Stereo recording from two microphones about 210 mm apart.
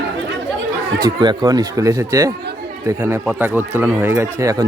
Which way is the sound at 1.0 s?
20° right (ahead or behind).